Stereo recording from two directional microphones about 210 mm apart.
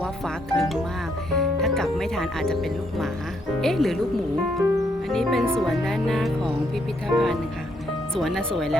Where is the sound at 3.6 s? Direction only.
Centre (ahead or behind).